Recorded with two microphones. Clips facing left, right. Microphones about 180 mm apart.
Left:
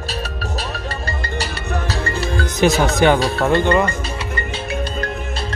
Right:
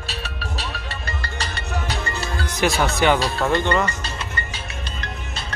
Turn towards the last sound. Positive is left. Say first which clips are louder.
# left 4 dB
turn(degrees=15)  # may be behind; listen again after turning